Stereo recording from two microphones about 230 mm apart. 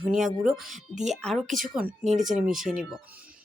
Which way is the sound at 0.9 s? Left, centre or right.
Right.